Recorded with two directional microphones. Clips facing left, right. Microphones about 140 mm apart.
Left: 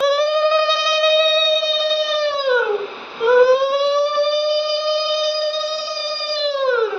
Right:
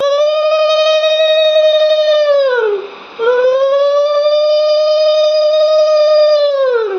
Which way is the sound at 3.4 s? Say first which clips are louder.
Right 5 dB; 55° right (ahead or behind).